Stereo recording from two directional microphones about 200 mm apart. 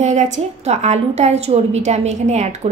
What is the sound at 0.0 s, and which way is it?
A woman's voice, 35° right (ahead or behind).